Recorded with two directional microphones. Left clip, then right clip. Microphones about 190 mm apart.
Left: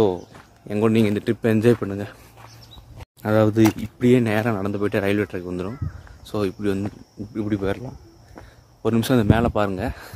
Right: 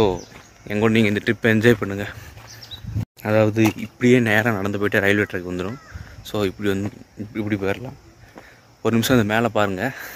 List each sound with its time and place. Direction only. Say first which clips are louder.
0.7 s speech: right 1 dB; 10° left (ahead or behind)
3.2 s speech: even; 15° left (ahead or behind)
3.6 s speech: even; 10° left (ahead or behind)